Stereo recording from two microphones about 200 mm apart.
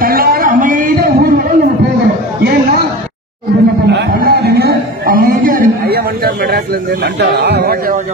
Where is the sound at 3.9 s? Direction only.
55° right (ahead or behind).